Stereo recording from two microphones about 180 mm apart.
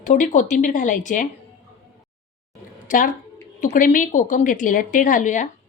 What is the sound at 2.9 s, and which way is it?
A woman's voice, 45° left (ahead or behind).